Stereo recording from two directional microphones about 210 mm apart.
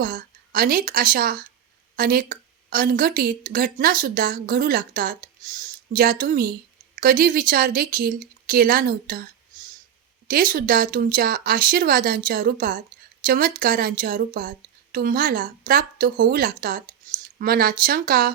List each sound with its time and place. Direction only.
0.0 s a woman's voice: 40° right (ahead or behind)